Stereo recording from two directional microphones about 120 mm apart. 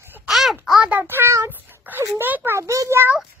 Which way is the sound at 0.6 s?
5° right (ahead or behind).